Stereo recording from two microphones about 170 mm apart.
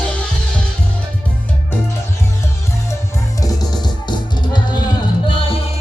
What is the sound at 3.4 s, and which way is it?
Music, 20° left (ahead or behind).